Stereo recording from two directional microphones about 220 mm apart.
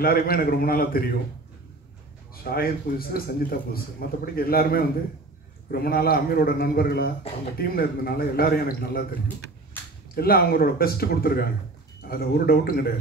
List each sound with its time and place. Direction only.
0.0 s a man's voice: 40° left (ahead or behind)
2.4 s a man's voice: 45° left (ahead or behind)
10.1 s a man's voice: 45° left (ahead or behind)